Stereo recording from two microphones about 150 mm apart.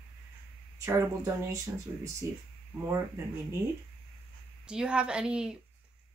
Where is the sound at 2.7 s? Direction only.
25° right (ahead or behind).